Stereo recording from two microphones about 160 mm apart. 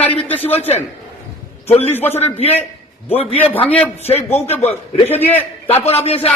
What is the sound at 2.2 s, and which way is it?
Speech, 40° left (ahead or behind).